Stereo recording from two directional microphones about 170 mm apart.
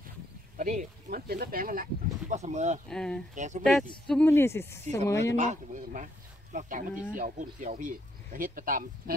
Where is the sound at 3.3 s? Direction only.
45° right (ahead or behind).